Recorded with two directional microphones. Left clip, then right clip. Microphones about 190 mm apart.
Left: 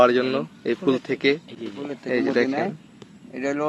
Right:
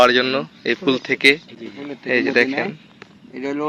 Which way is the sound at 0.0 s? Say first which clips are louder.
Right 4 dB; centre (ahead or behind).